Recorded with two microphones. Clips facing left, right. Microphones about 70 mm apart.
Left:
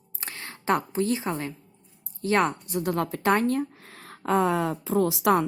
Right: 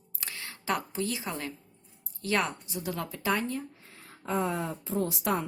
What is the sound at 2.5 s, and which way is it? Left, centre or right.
Speech, left.